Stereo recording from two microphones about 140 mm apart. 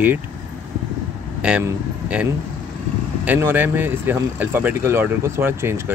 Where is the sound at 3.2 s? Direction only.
15° right (ahead or behind).